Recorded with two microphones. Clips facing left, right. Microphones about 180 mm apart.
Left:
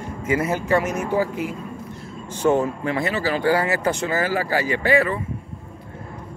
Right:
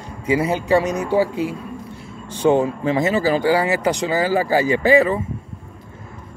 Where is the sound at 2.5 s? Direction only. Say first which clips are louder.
Right 4 dB; 20° right (ahead or behind).